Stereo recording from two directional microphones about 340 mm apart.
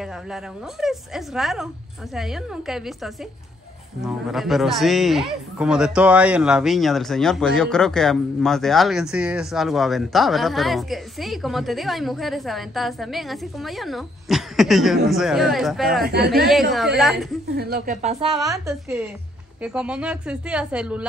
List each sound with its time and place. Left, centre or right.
0.0 s a man's voice: centre
16.0 s speech: right
16.7 s a man's voice: centre
17.6 s a woman's voice: right; by 21.0 s centre